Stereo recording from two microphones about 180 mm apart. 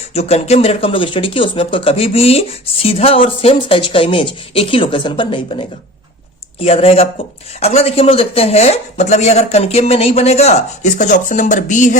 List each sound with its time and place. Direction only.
0.1 s speech: 35° left (ahead or behind)